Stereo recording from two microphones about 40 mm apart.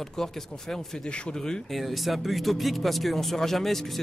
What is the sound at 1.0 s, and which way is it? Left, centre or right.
Speech, left.